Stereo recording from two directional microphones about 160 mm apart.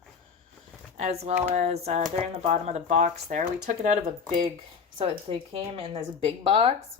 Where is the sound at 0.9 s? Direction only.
45° right (ahead or behind).